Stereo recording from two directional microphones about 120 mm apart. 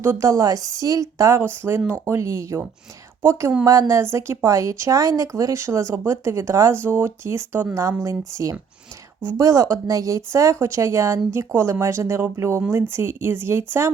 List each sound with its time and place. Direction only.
0.0 s a woman's voice: 25° right (ahead or behind)